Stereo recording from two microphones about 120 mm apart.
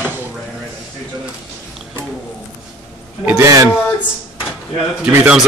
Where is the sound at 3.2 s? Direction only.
25° right (ahead or behind).